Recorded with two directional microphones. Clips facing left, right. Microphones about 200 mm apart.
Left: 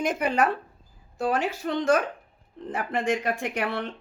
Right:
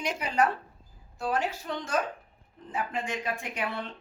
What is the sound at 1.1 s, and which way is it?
Speech, 75° left (ahead or behind).